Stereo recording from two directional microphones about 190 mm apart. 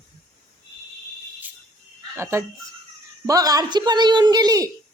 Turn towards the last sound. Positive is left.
turn(degrees=-20)  # may be behind; listen again after turning